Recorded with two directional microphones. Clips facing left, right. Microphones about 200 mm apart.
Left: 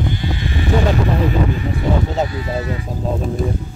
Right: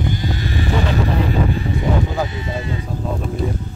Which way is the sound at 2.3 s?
25° right (ahead or behind).